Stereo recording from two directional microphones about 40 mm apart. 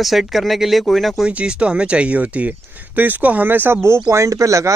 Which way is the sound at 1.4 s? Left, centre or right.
Right.